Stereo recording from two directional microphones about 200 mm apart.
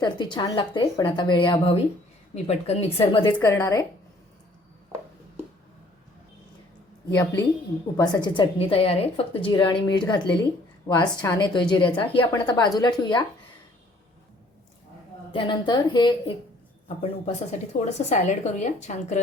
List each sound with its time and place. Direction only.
0.0 s a woman's voice: 20° left (ahead or behind)
3.4 s a woman's voice: 15° left (ahead or behind)
7.1 s a woman's voice: 20° left (ahead or behind)
15.3 s a woman's voice: 25° left (ahead or behind)
17.7 s speech: 35° left (ahead or behind)